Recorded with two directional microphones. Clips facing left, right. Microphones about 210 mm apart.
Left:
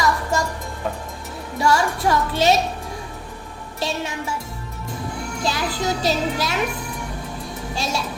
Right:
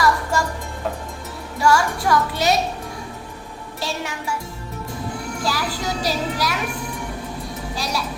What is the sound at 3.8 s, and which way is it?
Speech, 20° left (ahead or behind).